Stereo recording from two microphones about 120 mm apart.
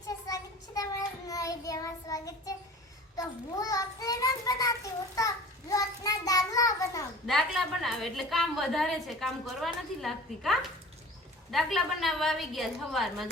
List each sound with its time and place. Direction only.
0.3 s child singing: 30° left (ahead or behind)
7.3 s a woman's voice: centre (ahead or behind)